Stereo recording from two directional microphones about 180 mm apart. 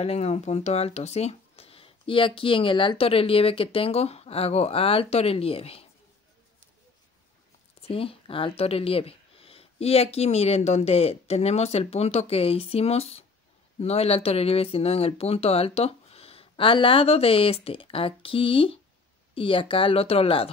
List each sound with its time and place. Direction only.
0.0 s speech: 35° left (ahead or behind)
7.8 s speech: 30° left (ahead or behind)